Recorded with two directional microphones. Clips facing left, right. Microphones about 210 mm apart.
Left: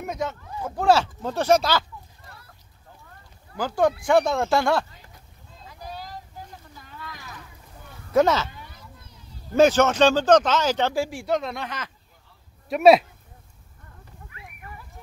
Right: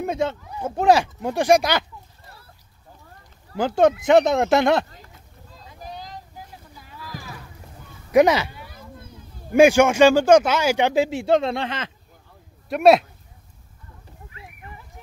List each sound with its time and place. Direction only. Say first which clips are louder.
0.0 s speech: right 5 dB; 30° right (ahead or behind)
3.5 s speech: right 4 dB; 25° right (ahead or behind)
5.7 s a sound: even; 20° right (ahead or behind)
6.8 s a sound: right 3 dB; 5° right (ahead or behind)
8.1 s speech: right 4 dB; 15° right (ahead or behind)
8.7 s children playing: right 7 dB; 50° right (ahead or behind)
9.5 s speech: right 3 dB; 10° right (ahead or behind); by 11.9 s 25° right (ahead or behind)
12.6 s speech: even; centre (ahead or behind)
14.3 s horse: even; 25° right (ahead or behind)